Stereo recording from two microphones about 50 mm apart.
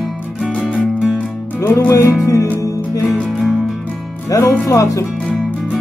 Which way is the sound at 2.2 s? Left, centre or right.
Left.